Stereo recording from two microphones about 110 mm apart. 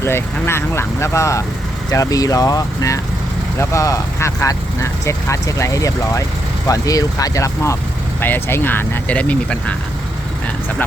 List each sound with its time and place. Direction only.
0.0 s speech: 25° left (ahead or behind)